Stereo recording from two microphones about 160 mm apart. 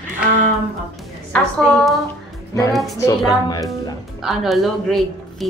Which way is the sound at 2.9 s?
20° left (ahead or behind).